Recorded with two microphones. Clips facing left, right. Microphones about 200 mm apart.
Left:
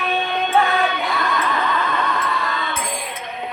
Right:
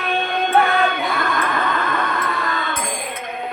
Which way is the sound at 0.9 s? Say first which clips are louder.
Even; 50° right (ahead or behind).